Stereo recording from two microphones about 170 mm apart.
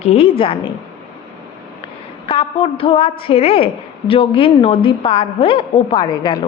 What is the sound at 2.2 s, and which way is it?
A woman's voice, 30° left (ahead or behind).